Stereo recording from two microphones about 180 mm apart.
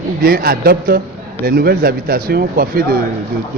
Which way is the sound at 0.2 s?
55° right (ahead or behind).